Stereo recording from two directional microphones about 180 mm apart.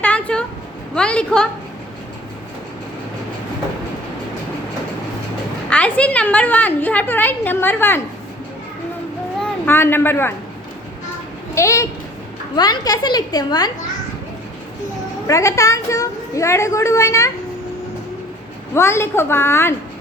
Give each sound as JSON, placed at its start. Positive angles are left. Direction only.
{"t": 0.0, "sound": "a sound", "side_deg": 5}
{"t": 0.9, "sound": "a woman's voice", "side_deg": 5}
{"t": 5.6, "sound": "a woman's voice", "side_deg": 5}
{"t": 9.4, "sound": "a woman's voice", "side_deg": 15}
{"t": 11.5, "sound": "a woman's voice", "side_deg": 15}
{"t": 15.3, "sound": "a woman's voice", "side_deg": 15}
{"t": 18.7, "sound": "a woman's voice", "side_deg": 15}